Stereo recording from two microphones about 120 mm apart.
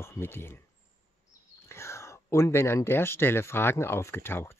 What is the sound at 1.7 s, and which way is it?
Speech, 20° left (ahead or behind).